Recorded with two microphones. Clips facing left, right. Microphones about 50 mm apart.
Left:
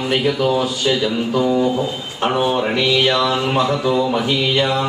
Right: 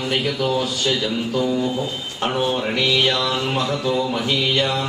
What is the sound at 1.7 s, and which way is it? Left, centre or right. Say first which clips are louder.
Mantra: left 4 dB; centre.